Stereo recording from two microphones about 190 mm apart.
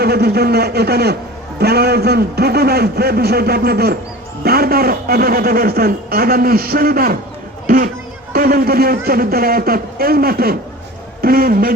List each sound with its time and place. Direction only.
0.0 s a man's voice: 55° right (ahead or behind)
8.3 s a man's voice: 55° right (ahead or behind)